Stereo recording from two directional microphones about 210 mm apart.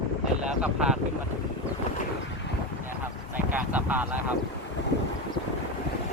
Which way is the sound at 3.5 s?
10° right (ahead or behind).